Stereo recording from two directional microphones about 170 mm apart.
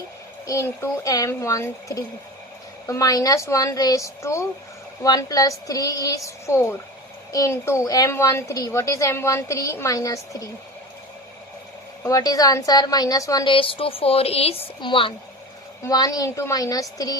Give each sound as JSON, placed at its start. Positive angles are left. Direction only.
{"t": 0.4, "sound": "a woman's voice", "side_deg": 15}
{"t": 12.0, "sound": "a woman's voice", "side_deg": 20}